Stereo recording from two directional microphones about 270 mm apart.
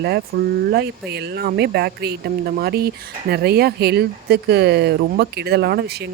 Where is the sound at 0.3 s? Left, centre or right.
Right.